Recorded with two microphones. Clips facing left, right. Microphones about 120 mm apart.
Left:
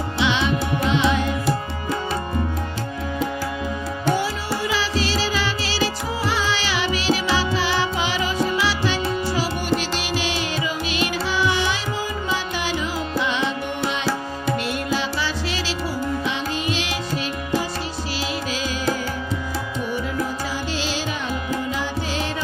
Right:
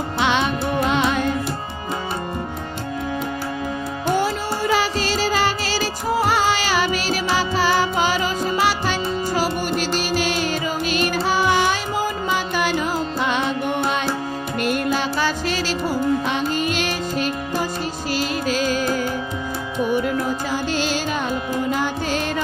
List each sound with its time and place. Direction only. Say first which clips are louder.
0.2 s music: right 1 dB; 50° right (ahead or behind)
4.1 s music: right 3 dB; 45° right (ahead or behind)
14.6 s music: right 3 dB; 50° right (ahead or behind)
20.7 s music: right 4 dB; 50° right (ahead or behind)